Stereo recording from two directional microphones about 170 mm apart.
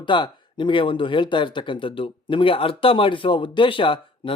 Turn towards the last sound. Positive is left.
turn(degrees=30)  # may be behind; listen again after turning